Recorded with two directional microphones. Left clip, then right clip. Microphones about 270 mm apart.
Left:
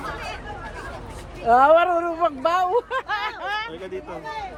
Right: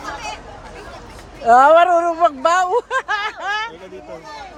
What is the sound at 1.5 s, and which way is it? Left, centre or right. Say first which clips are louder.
Speech: right 5 dB; right.